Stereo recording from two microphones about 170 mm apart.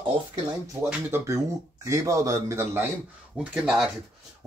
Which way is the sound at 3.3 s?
5° right (ahead or behind).